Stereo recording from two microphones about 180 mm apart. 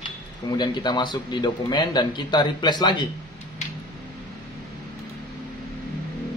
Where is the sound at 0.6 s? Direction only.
25° left (ahead or behind).